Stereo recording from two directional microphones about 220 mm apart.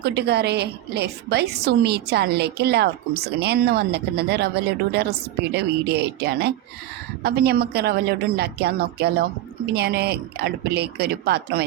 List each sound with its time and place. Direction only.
0.0 s a woman's voice: 50° right (ahead or behind)